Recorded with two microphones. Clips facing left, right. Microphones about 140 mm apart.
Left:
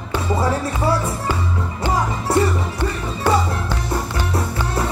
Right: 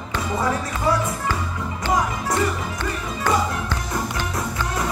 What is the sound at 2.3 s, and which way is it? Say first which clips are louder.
Music: left 7 dB; 30° left (ahead or behind).